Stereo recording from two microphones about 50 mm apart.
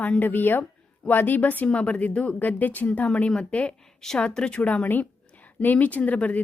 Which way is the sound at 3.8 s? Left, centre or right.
Centre.